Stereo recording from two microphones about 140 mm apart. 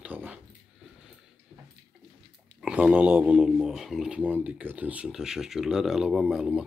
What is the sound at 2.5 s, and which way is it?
Speech, 5° right (ahead or behind).